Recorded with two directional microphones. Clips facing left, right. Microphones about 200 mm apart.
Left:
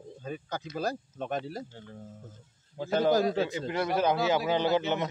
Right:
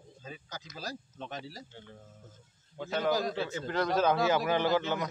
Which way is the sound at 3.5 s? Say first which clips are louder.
Left 1 dB; 10° left (ahead or behind).